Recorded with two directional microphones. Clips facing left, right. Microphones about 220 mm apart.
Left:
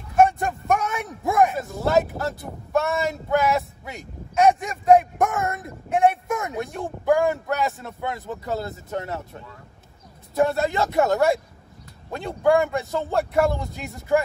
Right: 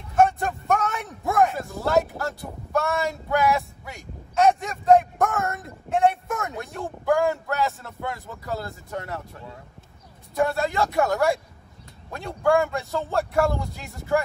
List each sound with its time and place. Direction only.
0.1 s a sound: 15° left (ahead or behind)
1.9 s speech: 20° left (ahead or behind)
10.3 s speech: 20° left (ahead or behind)
12.4 s speech: 15° left (ahead or behind)
13.6 s speech: centre (ahead or behind)